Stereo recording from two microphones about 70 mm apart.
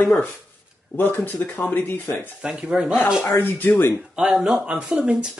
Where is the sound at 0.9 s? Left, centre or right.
Left.